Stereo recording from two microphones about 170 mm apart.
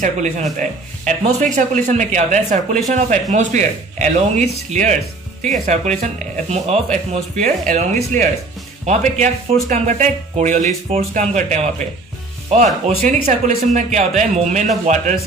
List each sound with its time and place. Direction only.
0.0 s speech: 45° right (ahead or behind)